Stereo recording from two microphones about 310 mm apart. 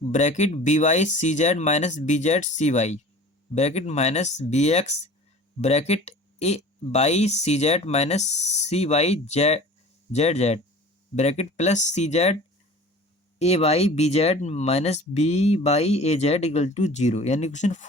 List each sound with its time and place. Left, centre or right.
0.1 s speech: left
13.4 s speech: centre